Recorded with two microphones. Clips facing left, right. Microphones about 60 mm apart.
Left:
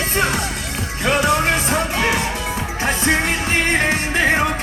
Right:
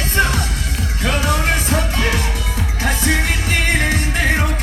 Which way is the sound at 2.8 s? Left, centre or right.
Left.